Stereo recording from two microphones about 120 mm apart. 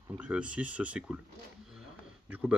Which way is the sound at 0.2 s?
10° right (ahead or behind).